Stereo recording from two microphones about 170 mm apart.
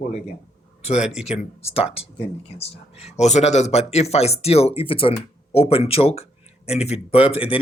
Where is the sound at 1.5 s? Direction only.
35° left (ahead or behind).